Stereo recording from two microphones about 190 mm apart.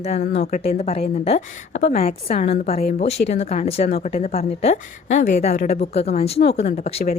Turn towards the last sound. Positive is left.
turn(degrees=35)  # may be behind; listen again after turning